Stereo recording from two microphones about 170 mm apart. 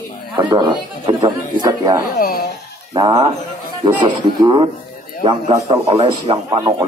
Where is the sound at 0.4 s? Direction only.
25° right (ahead or behind).